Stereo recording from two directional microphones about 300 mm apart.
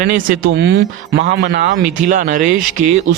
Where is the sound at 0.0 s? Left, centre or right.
Right.